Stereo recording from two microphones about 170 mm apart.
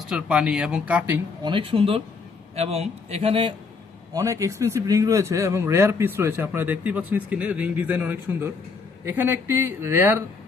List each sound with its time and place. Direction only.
0.1 s speech: 5° right (ahead or behind)
1.5 s a man's voice: 30° right (ahead or behind)
4.1 s a man's voice: 20° right (ahead or behind)